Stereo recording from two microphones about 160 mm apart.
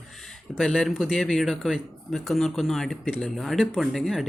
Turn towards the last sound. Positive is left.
turn(degrees=0)  # may be behind; listen again after turning